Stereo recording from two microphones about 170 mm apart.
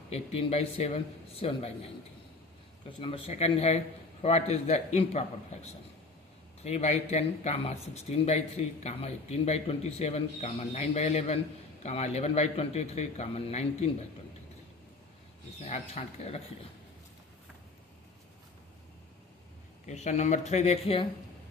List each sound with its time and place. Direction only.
0.1 s a man's voice: 40° left (ahead or behind)
3.0 s a man's voice: 35° left (ahead or behind)
6.6 s a man's voice: 40° left (ahead or behind)
15.6 s a man's voice: 40° left (ahead or behind)
19.9 s a man's voice: 45° left (ahead or behind)